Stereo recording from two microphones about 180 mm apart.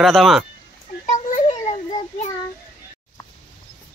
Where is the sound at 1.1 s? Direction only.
40° left (ahead or behind).